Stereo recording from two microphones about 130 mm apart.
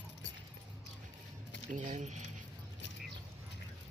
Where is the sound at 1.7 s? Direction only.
65° right (ahead or behind).